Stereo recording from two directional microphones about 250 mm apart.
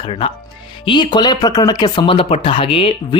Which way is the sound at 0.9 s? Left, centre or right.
Centre.